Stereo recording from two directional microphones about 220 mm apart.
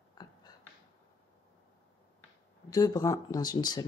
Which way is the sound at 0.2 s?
20° left (ahead or behind).